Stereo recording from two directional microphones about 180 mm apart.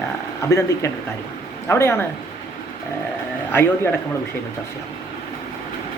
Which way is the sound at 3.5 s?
10° left (ahead or behind).